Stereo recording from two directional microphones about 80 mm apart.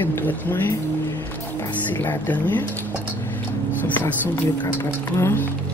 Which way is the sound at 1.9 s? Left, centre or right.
Left.